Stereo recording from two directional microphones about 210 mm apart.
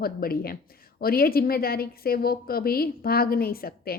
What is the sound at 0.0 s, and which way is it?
A woman's voice, 45° left (ahead or behind).